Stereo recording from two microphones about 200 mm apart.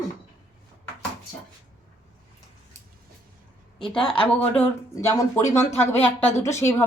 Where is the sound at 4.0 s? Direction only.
5° left (ahead or behind).